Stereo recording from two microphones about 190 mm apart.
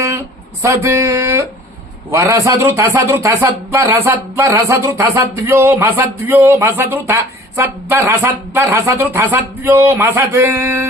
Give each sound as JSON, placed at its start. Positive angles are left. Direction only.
{"t": 0.6, "sound": "speech", "side_deg": -15}